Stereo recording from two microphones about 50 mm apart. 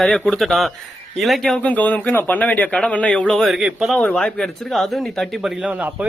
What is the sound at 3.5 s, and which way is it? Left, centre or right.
Speech, centre.